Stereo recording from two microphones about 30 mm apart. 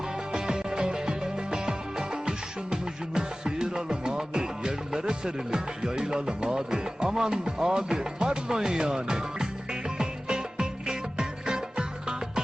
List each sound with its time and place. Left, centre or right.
0.3 s music: right